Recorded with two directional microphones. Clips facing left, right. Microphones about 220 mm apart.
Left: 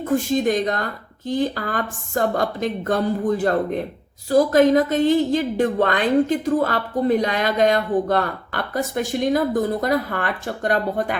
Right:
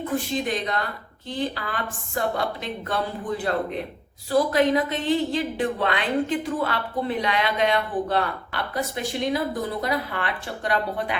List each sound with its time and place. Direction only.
0.0 s a woman's voice: 45° left (ahead or behind)